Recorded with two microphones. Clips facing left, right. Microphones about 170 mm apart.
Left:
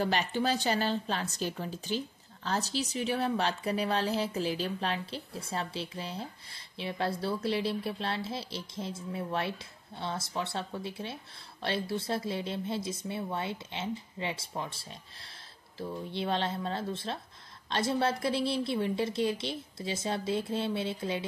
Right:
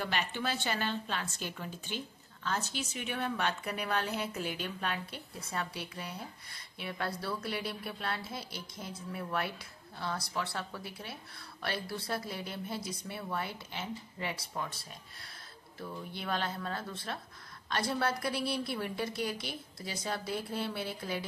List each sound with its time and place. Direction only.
0.0 s a woman's voice: 40° left (ahead or behind)